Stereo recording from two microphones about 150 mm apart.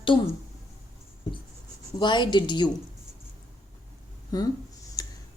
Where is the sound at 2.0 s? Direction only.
30° left (ahead or behind).